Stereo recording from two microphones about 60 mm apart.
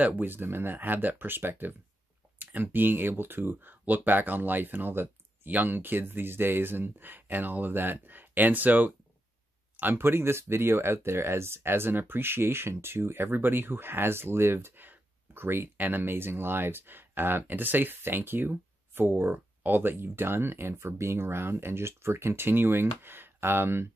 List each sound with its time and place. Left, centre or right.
0.0 s speech: right